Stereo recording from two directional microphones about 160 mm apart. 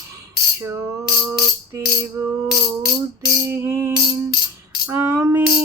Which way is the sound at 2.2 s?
20° right (ahead or behind).